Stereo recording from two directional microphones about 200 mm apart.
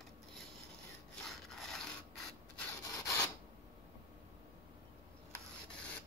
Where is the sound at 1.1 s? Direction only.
Centre (ahead or behind).